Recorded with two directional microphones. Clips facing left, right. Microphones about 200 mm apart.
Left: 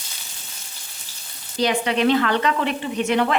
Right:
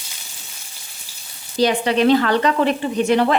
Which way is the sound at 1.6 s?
35° right (ahead or behind).